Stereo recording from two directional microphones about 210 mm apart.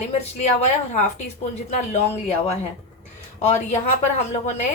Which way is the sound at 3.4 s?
35° left (ahead or behind).